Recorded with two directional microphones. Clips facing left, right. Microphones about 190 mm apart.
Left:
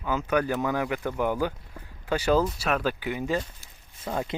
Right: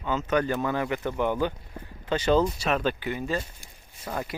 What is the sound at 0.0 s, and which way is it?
Speech, 10° left (ahead or behind).